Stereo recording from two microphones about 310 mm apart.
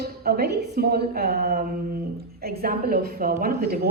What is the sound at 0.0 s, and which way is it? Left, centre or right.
A woman's voice, right.